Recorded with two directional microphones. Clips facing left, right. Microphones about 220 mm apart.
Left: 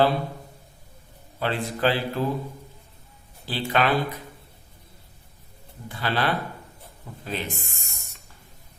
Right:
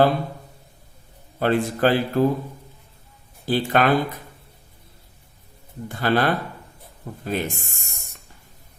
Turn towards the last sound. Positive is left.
turn(degrees=-50)  # may be behind; listen again after turning